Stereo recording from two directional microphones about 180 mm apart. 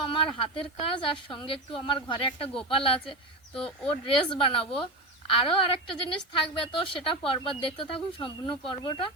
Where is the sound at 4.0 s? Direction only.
30° left (ahead or behind).